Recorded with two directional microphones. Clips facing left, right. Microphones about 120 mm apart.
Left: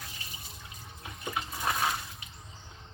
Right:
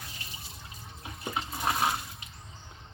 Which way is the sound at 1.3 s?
25° right (ahead or behind).